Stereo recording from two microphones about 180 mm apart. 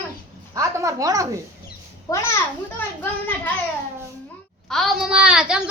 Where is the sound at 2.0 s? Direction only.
15° left (ahead or behind).